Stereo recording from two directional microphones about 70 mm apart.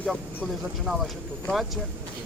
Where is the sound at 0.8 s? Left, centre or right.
Centre.